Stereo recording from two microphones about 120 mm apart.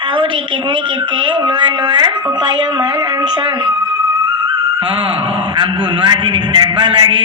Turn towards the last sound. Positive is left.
turn(degrees=-40)  # may be behind; listen again after turning